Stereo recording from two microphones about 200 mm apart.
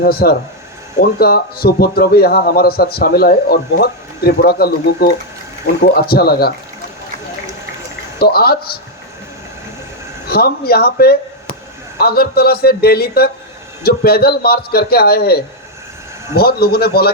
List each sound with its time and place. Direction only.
0.0 s a man's voice: 50° left (ahead or behind)
8.2 s a man's voice: 50° left (ahead or behind)
10.2 s a man's voice: 50° left (ahead or behind)